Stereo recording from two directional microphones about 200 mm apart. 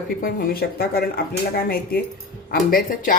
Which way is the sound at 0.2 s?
45° left (ahead or behind).